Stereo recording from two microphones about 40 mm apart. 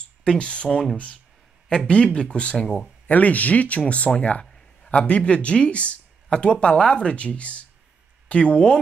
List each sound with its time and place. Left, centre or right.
0.3 s speech: left
3.1 s speech: left
4.9 s speech: left